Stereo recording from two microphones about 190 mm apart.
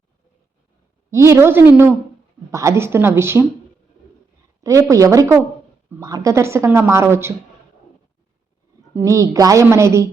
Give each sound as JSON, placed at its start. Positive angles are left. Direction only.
{"t": 1.1, "sound": "a woman's voice", "side_deg": -15}
{"t": 4.6, "sound": "a woman's voice", "side_deg": -15}
{"t": 9.0, "sound": "a woman's voice", "side_deg": -15}